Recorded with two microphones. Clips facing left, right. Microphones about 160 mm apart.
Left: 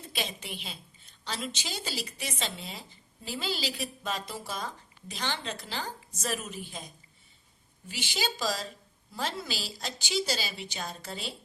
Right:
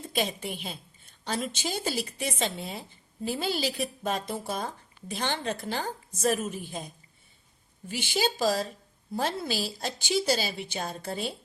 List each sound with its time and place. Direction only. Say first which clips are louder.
0.1 s a woman's voice: right 7 dB; 50° right (ahead or behind)
7.9 s a woman's voice: right 6 dB; 50° right (ahead or behind)